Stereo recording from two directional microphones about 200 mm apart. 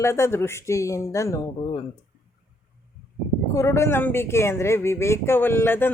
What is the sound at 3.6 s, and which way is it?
Speech, 15° left (ahead or behind).